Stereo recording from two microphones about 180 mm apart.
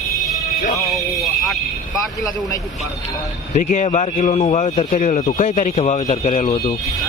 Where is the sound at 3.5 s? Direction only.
40° left (ahead or behind).